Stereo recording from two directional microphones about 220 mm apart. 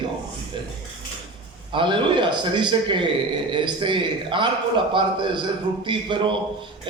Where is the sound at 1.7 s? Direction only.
20° right (ahead or behind).